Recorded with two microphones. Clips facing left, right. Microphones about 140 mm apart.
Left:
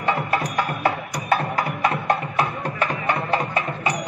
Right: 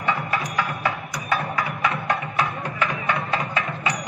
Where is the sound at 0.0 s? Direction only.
30° left (ahead or behind).